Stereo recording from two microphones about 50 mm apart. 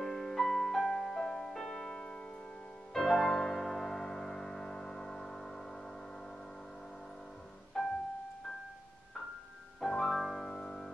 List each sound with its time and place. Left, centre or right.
0.0 s music: centre
2.0 s music: centre
2.9 s music: centre
7.8 s music: centre
9.8 s music: centre